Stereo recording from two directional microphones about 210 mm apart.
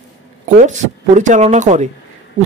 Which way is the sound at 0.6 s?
35° right (ahead or behind).